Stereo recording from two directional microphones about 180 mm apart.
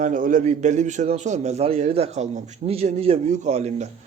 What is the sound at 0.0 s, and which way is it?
A man's voice, 45° right (ahead or behind).